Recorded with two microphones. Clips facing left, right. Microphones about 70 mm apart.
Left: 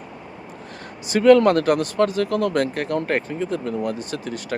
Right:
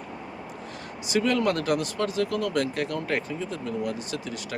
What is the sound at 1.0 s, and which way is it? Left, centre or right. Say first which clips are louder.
Speech: left 10 dB; left.